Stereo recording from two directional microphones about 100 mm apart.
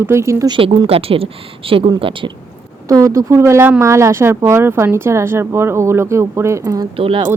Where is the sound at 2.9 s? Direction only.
30° right (ahead or behind).